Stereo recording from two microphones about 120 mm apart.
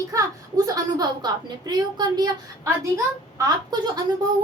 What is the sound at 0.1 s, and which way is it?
A woman's voice, 30° right (ahead or behind).